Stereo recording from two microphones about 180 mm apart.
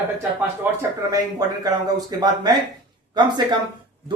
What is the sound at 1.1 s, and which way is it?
A man's voice, 20° right (ahead or behind).